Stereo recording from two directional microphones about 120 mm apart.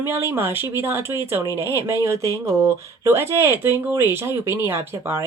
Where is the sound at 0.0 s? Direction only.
20° right (ahead or behind).